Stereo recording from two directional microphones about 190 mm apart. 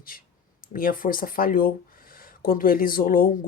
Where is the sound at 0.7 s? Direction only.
45° left (ahead or behind).